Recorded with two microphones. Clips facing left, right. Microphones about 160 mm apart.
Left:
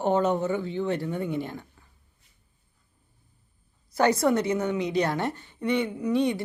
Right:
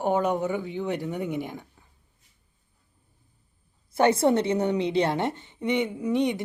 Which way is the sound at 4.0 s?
25° right (ahead or behind).